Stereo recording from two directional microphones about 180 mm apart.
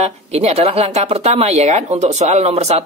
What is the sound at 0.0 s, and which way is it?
Speech, 35° right (ahead or behind).